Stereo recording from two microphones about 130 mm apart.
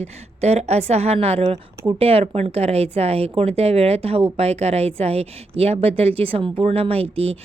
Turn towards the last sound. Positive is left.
turn(degrees=-50)  # may be behind; listen again after turning